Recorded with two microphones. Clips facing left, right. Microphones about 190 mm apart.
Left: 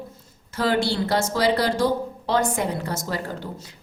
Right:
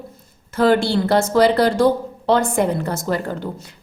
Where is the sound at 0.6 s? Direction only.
55° right (ahead or behind).